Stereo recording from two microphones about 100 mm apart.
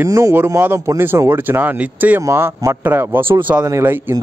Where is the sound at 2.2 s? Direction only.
30° right (ahead or behind).